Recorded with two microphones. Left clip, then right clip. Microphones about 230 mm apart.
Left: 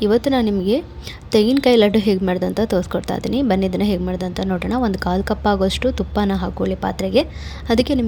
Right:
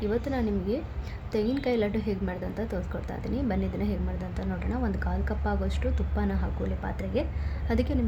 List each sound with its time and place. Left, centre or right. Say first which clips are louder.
0.0 s a woman's voice: left 13 dB; left